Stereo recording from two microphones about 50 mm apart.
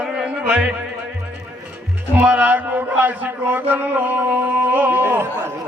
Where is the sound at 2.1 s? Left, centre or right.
Right.